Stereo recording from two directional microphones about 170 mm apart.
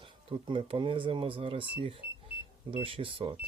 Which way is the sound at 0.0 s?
30° right (ahead or behind).